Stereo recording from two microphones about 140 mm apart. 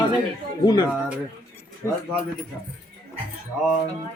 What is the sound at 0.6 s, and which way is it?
Speech, 30° left (ahead or behind).